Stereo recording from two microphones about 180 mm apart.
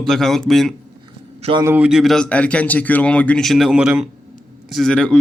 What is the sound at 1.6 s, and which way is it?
Speech, 5° right (ahead or behind).